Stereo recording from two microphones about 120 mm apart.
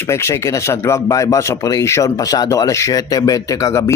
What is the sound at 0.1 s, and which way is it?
Speech, 25° left (ahead or behind).